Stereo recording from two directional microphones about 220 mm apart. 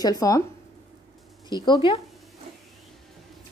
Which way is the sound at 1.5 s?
20° left (ahead or behind).